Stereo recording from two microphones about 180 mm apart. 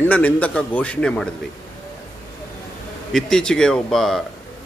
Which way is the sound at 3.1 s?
5° left (ahead or behind).